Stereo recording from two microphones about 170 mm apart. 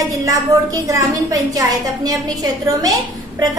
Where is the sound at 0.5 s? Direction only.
20° right (ahead or behind).